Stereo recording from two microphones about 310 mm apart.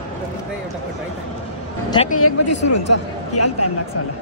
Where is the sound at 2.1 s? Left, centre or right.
Left.